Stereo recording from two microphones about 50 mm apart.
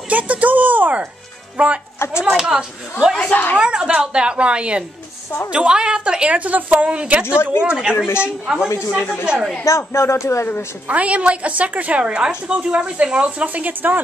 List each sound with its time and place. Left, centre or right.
0.1 s a woman's voice: right
2.0 s speech: left
2.4 s a woman's voice: centre
8.6 s speech: left
9.2 s a woman's voice: centre
9.7 s speech: left
10.9 s a woman's voice: right